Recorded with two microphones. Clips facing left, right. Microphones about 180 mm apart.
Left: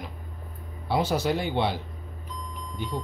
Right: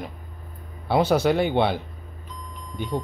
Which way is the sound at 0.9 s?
65° right (ahead or behind).